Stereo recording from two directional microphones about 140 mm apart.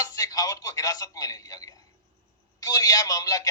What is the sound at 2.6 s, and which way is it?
Speech, 25° left (ahead or behind).